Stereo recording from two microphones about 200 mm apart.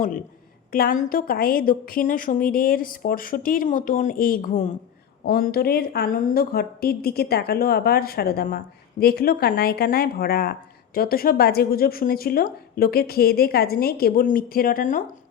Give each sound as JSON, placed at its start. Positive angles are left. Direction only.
{"t": 0.7, "sound": "a woman's voice", "side_deg": 45}